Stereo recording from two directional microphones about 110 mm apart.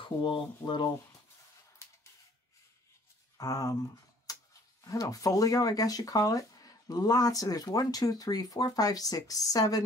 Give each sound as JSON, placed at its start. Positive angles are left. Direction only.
{"t": 0.0, "sound": "rub", "side_deg": 50}
{"t": 3.3, "sound": "speech", "side_deg": 30}
{"t": 4.3, "sound": "a sound", "side_deg": 30}
{"t": 4.8, "sound": "speech", "side_deg": 30}